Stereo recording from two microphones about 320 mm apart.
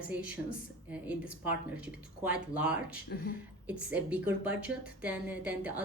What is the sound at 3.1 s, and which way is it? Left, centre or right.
Speech, left.